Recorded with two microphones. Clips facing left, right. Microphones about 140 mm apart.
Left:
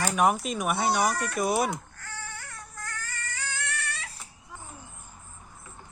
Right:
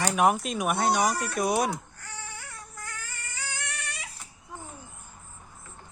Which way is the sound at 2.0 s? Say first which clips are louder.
Left 1 dB; 15° right (ahead or behind).